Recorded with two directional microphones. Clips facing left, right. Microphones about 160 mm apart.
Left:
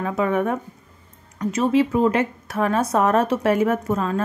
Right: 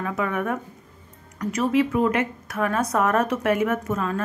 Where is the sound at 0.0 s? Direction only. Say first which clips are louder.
Left 5 dB; 25° left (ahead or behind).